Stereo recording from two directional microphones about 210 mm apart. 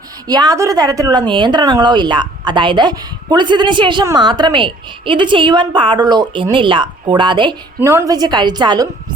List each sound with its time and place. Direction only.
0.3 s a woman's voice: 20° right (ahead or behind)
7.8 s a woman's voice: 10° right (ahead or behind)